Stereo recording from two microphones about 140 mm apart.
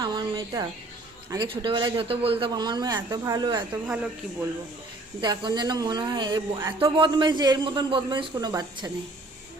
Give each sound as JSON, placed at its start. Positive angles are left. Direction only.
{"t": 0.0, "sound": "a sound", "side_deg": -30}
{"t": 1.3, "sound": "a man's voice", "side_deg": -35}
{"t": 3.8, "sound": "speech", "side_deg": -10}
{"t": 5.2, "sound": "a man's voice", "side_deg": -30}